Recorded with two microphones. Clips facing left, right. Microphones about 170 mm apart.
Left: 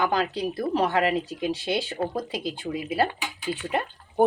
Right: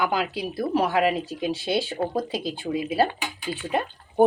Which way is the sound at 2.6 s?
30° right (ahead or behind).